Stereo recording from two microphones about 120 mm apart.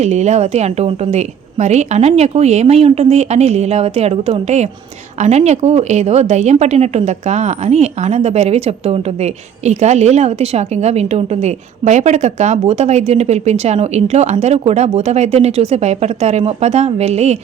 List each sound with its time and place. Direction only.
0.0 s a woman's voice: 70° right (ahead or behind)